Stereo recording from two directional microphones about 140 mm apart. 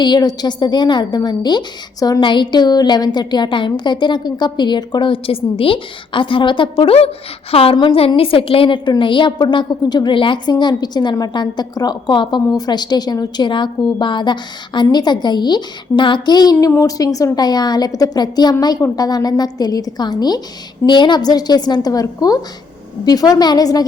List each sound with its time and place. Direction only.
0.0 s a woman's voice: 30° left (ahead or behind)